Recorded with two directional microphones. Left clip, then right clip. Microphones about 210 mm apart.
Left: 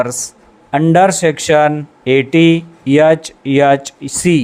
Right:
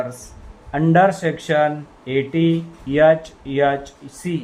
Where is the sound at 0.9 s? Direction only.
30° left (ahead or behind).